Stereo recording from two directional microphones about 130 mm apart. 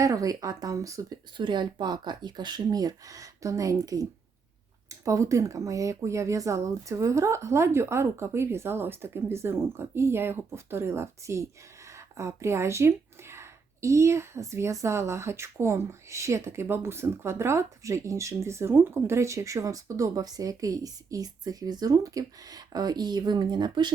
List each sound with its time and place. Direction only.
0.0 s speech: 25° right (ahead or behind)
1.4 s speech: 35° right (ahead or behind)